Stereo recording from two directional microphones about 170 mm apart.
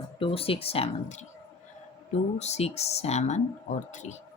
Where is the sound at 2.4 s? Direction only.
40° left (ahead or behind).